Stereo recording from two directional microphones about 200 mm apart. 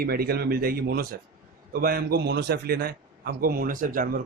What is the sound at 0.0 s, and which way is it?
A man's voice, 50° right (ahead or behind).